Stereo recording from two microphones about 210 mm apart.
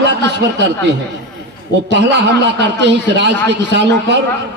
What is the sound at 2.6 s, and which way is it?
A man's voice, 55° right (ahead or behind).